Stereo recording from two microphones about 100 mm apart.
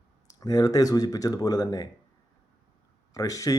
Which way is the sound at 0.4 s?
40° left (ahead or behind).